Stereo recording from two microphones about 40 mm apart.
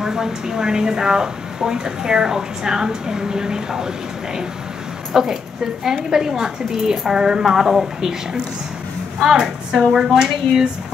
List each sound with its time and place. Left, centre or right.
0.0 s a woman's voice: centre
5.1 s a woman's voice: centre